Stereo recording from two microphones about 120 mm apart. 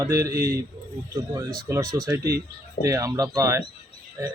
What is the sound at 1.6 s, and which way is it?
Speech, 25° right (ahead or behind).